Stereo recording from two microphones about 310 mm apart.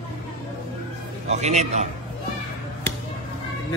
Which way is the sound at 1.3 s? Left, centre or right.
Right.